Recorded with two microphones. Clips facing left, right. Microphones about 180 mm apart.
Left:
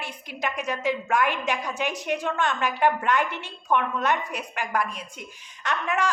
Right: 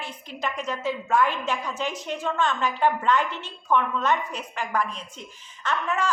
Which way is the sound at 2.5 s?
10° left (ahead or behind).